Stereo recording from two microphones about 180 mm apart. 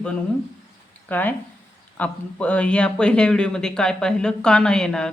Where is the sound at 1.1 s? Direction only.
10° left (ahead or behind).